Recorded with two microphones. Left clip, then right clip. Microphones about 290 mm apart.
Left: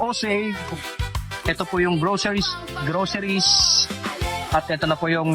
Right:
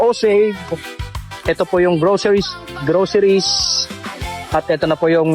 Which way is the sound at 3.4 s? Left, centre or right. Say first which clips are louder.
Right 1 dB; centre.